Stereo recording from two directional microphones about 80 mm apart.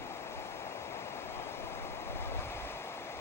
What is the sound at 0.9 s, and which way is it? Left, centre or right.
Waves, left.